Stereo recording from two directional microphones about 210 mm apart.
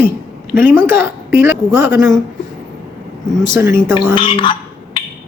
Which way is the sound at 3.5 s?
10° right (ahead or behind).